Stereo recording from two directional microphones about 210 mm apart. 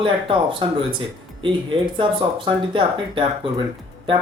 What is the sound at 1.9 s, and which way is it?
Speech, 25° right (ahead or behind).